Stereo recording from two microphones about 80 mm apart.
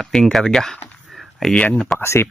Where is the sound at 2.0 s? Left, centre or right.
Left.